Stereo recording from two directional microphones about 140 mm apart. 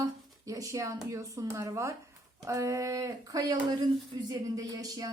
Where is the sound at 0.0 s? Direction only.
25° right (ahead or behind).